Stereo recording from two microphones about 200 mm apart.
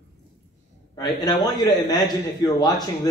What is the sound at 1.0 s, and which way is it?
A man's voice, 20° left (ahead or behind).